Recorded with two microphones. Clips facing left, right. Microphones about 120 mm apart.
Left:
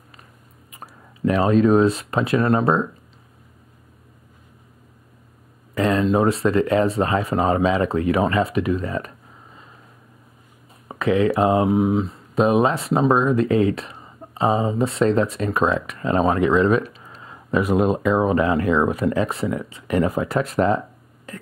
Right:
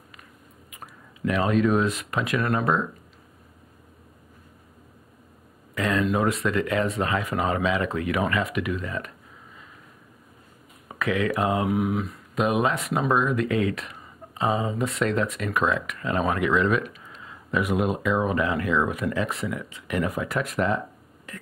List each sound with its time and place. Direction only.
0.7 s speech: 35° left (ahead or behind)
5.8 s speech: 30° left (ahead or behind)
10.9 s speech: 30° left (ahead or behind)